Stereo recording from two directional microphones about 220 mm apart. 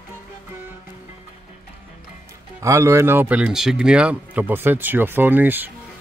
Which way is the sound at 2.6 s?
15° right (ahead or behind).